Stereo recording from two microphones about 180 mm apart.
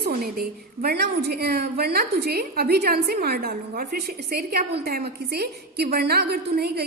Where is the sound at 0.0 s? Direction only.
60° right (ahead or behind).